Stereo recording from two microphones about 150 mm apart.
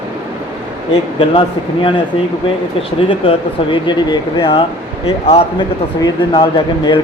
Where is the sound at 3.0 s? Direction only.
35° left (ahead or behind).